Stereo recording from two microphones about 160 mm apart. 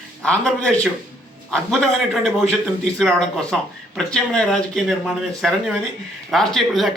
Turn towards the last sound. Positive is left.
turn(degrees=0)  # may be behind; listen again after turning